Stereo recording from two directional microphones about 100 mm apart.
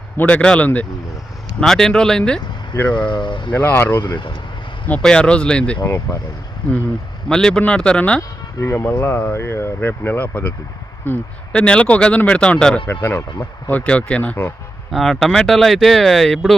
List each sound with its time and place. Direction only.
0.2 s speech: 15° left (ahead or behind)
3.1 s speech: 50° left (ahead or behind)
3.5 s speech: 20° left (ahead or behind)
4.0 s speech: 45° left (ahead or behind)
4.9 s speech: 10° left (ahead or behind)
5.8 s speech: 30° left (ahead or behind)
7.3 s speech: 5° left (ahead or behind)
8.6 s speech: 25° left (ahead or behind); by 12.8 s 10° left (ahead or behind)
12.9 s speech: 20° left (ahead or behind)
14.9 s speech: centre (ahead or behind)